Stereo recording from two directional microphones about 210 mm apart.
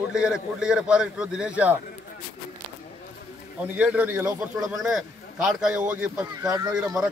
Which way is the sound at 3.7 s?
5° right (ahead or behind).